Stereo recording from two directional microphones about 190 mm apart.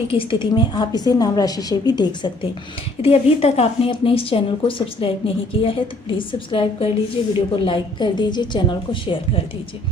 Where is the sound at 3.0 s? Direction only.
30° left (ahead or behind).